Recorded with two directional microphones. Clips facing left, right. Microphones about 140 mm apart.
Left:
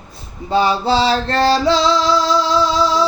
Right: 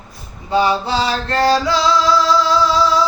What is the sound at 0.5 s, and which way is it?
Music, 30° left (ahead or behind).